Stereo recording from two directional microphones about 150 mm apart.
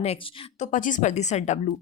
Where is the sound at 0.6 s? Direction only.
60° left (ahead or behind).